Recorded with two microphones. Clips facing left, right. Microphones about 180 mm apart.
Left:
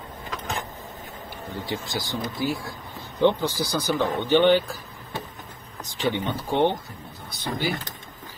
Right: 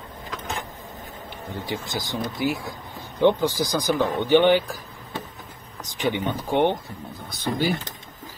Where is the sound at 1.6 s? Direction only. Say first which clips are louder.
Even; 20° right (ahead or behind).